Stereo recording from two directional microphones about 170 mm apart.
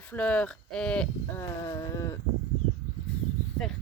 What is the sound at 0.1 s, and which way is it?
Speech, 10° left (ahead or behind).